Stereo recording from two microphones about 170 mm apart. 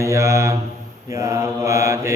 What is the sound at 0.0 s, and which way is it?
Mantra, 15° right (ahead or behind).